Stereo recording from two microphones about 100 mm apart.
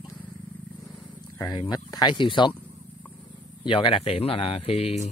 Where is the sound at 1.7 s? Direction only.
45° left (ahead or behind).